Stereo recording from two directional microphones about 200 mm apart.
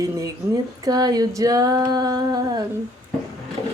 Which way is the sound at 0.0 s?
15° right (ahead or behind).